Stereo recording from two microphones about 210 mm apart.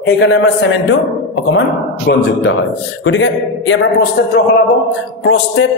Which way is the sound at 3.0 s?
60° left (ahead or behind).